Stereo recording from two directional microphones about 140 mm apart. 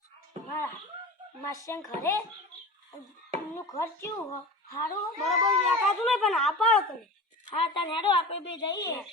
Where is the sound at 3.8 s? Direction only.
20° left (ahead or behind).